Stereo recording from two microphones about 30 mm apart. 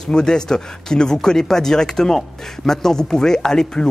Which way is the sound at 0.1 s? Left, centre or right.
Left.